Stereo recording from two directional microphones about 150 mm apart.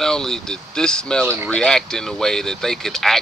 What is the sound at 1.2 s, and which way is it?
Speech, 15° right (ahead or behind).